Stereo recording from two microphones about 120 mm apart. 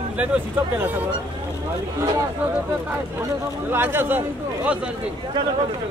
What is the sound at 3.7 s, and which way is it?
Speech, 15° right (ahead or behind).